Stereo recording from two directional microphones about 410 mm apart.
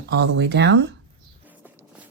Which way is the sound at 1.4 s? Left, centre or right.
Centre.